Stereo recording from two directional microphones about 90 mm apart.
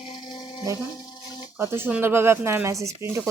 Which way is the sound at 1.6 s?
25° right (ahead or behind).